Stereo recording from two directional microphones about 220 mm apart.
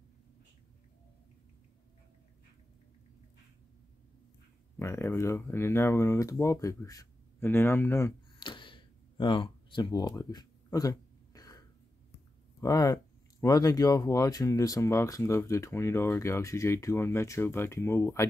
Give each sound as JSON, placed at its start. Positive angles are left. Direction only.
{"t": 4.7, "sound": "speech", "side_deg": 10}
{"t": 6.4, "sound": "a sound", "side_deg": 15}
{"t": 12.5, "sound": "speech", "side_deg": 15}